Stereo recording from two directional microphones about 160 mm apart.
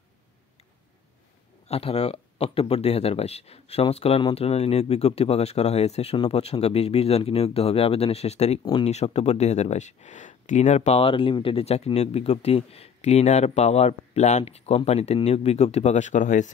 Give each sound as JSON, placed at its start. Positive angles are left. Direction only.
{"t": 1.7, "sound": "speech", "side_deg": 35}